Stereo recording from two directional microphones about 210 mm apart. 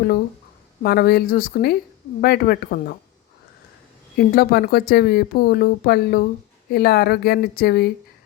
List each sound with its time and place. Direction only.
0.8 s speech: 50° left (ahead or behind)
4.2 s speech: 45° left (ahead or behind)